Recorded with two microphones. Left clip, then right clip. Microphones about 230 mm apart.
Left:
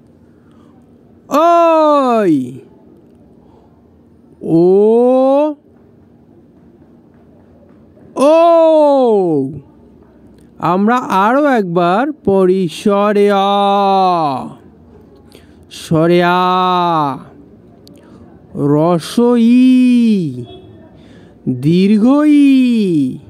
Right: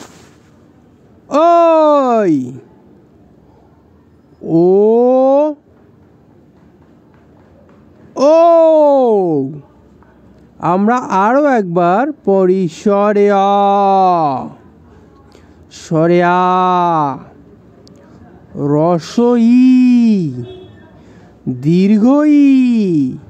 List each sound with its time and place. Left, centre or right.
1.2 s a sound: centre
4.4 s mantra: centre
8.1 s a sound: centre
10.6 s speech: centre
15.7 s speech: centre
18.5 s speech: centre